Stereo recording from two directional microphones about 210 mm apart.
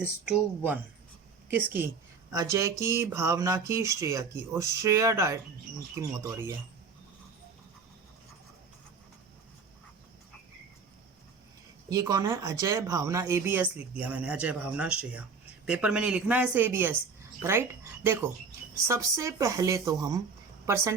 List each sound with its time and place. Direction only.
0.3 s speech: 5° right (ahead or behind)
11.9 s speech: 15° right (ahead or behind)